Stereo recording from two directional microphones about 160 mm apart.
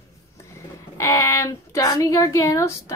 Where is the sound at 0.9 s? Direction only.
20° left (ahead or behind).